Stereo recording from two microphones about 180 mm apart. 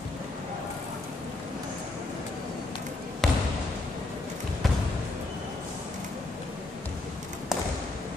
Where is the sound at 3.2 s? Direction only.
5° left (ahead or behind).